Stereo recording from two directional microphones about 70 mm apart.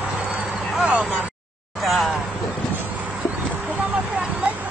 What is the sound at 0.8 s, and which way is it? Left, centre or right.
Speech, centre.